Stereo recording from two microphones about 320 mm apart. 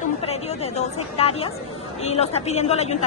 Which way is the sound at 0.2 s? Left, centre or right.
Centre.